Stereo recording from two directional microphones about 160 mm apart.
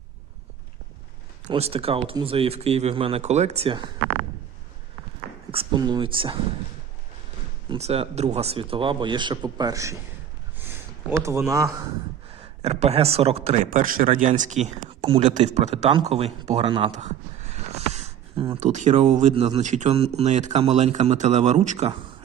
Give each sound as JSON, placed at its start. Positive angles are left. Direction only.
{"t": 1.5, "sound": "speech", "side_deg": -40}
{"t": 5.5, "sound": "speech", "side_deg": -30}
{"t": 7.7, "sound": "speech", "side_deg": -40}
{"t": 11.1, "sound": "speech", "side_deg": -15}
{"t": 12.6, "sound": "speech", "side_deg": -40}
{"t": 13.7, "sound": "a man's voice", "side_deg": -60}
{"t": 14.8, "sound": "speech", "side_deg": -30}
{"t": 15.2, "sound": "speech", "side_deg": -50}
{"t": 16.9, "sound": "a sound", "side_deg": -45}
{"t": 18.6, "sound": "speech", "side_deg": -50}